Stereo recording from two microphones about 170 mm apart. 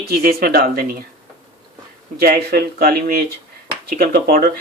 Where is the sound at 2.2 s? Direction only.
65° right (ahead or behind).